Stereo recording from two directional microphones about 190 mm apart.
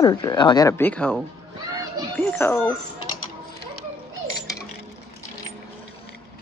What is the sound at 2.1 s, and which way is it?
Speech, 10° left (ahead or behind).